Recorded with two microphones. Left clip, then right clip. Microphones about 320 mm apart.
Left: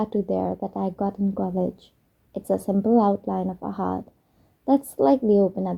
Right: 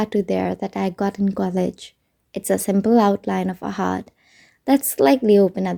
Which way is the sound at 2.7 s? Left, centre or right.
Right.